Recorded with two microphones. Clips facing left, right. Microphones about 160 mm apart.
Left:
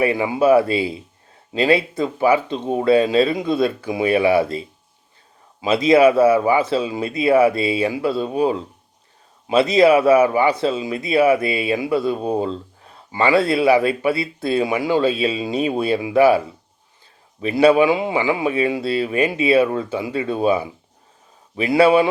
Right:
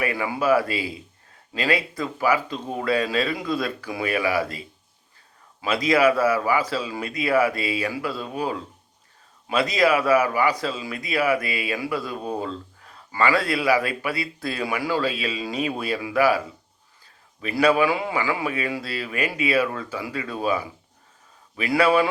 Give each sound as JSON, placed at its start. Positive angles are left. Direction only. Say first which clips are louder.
{"t": 0.0, "sound": "a man's voice", "louder": "left 7 dB", "side_deg": 25}
{"t": 17.4, "sound": "a man's voice", "louder": "left 6 dB", "side_deg": 25}